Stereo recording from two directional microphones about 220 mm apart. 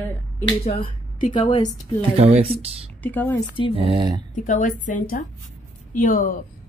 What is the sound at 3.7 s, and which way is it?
Speech, 25° right (ahead or behind).